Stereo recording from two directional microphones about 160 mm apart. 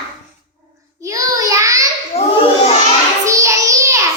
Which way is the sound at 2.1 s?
40° left (ahead or behind).